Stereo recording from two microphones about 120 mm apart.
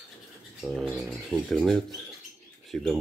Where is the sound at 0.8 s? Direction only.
10° right (ahead or behind).